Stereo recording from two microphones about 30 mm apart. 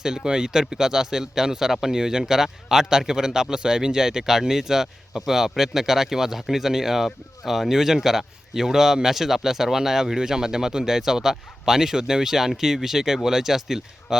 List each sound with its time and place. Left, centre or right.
0.3 s speech: right